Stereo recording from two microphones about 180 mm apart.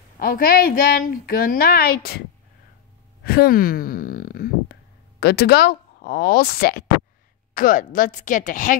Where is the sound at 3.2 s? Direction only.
60° left (ahead or behind).